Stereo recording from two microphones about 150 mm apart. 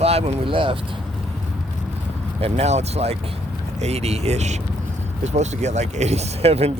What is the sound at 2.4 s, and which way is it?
Speech, 45° right (ahead or behind).